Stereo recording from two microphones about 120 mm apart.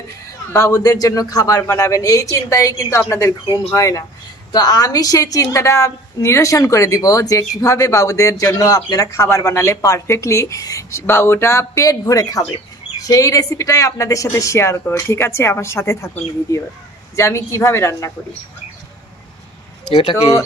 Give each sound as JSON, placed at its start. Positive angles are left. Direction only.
{"t": 0.5, "sound": "a woman's voice", "side_deg": 25}
{"t": 19.9, "sound": "speech", "side_deg": 50}